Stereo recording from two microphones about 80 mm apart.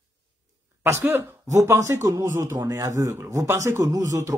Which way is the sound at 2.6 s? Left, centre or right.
Right.